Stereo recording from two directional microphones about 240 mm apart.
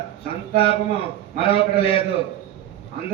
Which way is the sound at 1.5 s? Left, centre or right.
Left.